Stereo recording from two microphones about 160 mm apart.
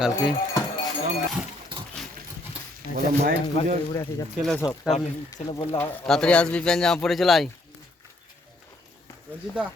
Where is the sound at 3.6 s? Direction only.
40° left (ahead or behind).